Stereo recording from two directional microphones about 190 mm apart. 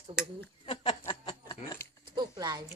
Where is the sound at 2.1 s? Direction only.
25° right (ahead or behind).